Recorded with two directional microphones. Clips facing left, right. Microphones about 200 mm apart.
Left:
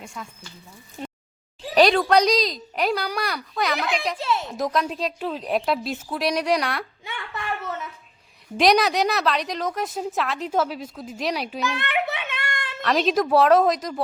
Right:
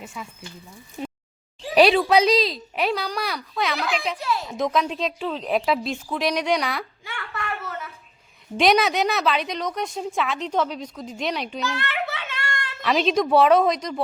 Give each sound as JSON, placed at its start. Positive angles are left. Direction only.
{"t": 0.0, "sound": "a woman's voice", "side_deg": -5}
{"t": 1.7, "sound": "a woman's voice", "side_deg": -5}
{"t": 4.2, "sound": "speech", "side_deg": 25}
{"t": 4.4, "sound": "a woman's voice", "side_deg": 0}
{"t": 7.0, "sound": "a sound", "side_deg": 20}
{"t": 8.5, "sound": "a woman's voice", "side_deg": 0}
{"t": 11.7, "sound": "a sound", "side_deg": 20}
{"t": 12.8, "sound": "a woman's voice", "side_deg": 0}